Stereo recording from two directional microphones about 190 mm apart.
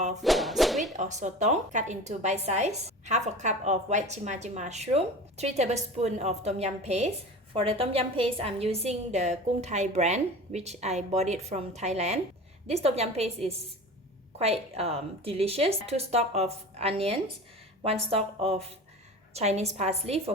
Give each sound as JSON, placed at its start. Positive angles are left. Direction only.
{"t": 0.2, "sound": "whip", "side_deg": 0}
{"t": 0.9, "sound": "a woman's voice", "side_deg": -40}